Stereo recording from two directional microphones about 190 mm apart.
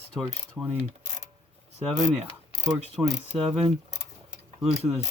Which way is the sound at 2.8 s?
30° right (ahead or behind).